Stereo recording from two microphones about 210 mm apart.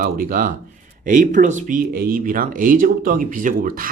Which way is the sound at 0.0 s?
45° right (ahead or behind).